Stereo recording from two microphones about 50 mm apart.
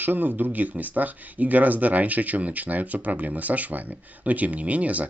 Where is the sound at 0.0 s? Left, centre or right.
Right.